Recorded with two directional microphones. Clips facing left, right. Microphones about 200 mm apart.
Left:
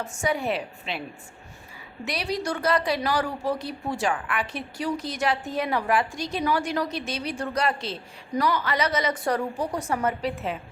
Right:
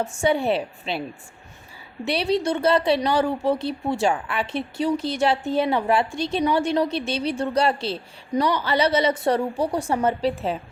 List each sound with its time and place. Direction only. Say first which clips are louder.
0.2 s speech: right 5 dB; 30° right (ahead or behind)
2.0 s speech: right 6 dB; 30° right (ahead or behind)